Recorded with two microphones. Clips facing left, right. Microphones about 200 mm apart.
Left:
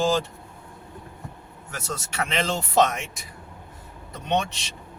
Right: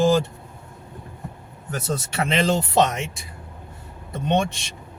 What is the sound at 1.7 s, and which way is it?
Speech, 35° right (ahead or behind).